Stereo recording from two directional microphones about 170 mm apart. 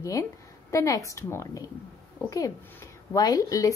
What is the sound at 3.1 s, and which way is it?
Speech, 20° left (ahead or behind).